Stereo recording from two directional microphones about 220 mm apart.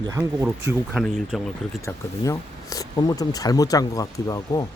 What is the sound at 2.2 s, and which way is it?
Speech, 15° left (ahead or behind).